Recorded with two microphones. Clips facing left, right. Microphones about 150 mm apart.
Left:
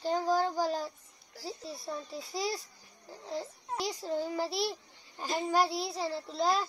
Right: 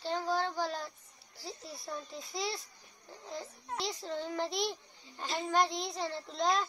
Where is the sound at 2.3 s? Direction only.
35° left (ahead or behind).